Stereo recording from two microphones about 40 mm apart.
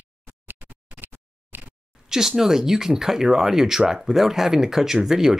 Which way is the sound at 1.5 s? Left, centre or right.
Right.